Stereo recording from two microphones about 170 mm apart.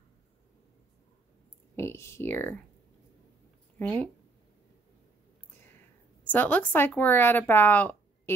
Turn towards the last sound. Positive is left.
turn(degrees=10)  # may be behind; listen again after turning